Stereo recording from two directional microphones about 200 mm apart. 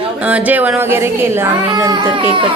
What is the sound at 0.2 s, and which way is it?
Speech, 5° right (ahead or behind).